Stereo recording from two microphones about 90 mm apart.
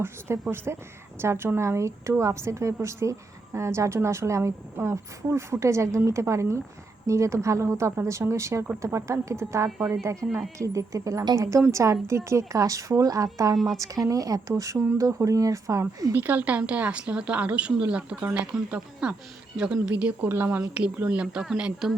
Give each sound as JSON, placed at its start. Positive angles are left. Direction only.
{"t": 0.5, "sound": "a woman's voice", "side_deg": -25}
{"t": 16.1, "sound": "a woman's voice", "side_deg": -20}
{"t": 20.2, "sound": "a woman's voice", "side_deg": -25}